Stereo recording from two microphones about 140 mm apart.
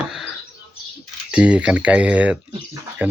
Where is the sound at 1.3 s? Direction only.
10° right (ahead or behind).